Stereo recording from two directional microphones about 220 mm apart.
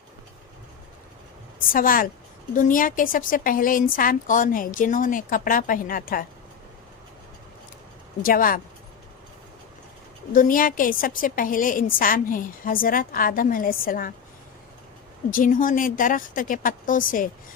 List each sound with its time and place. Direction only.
1.5 s a woman's voice: 40° left (ahead or behind)
8.2 s a woman's voice: 40° left (ahead or behind)
10.3 s a woman's voice: 40° left (ahead or behind)
15.3 s a woman's voice: 40° left (ahead or behind)